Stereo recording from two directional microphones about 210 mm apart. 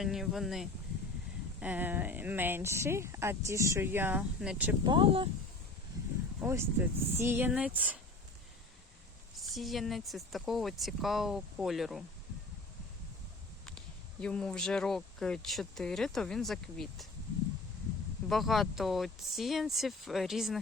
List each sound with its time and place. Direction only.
0.0 s speech: centre (ahead or behind)
4.8 s speech: 25° right (ahead or behind)
6.4 s speech: 10° right (ahead or behind)
9.4 s speech: centre (ahead or behind)
13.7 s speech: 5° left (ahead or behind)
18.3 s speech: centre (ahead or behind)